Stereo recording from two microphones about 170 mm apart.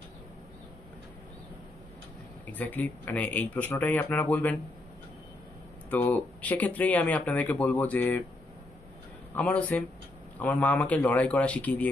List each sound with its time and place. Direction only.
2.5 s speech: 10° left (ahead or behind)
5.9 s speech: 10° left (ahead or behind)
9.3 s speech: 10° left (ahead or behind)